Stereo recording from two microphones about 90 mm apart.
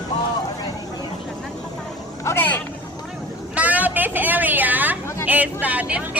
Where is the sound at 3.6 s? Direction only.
15° right (ahead or behind).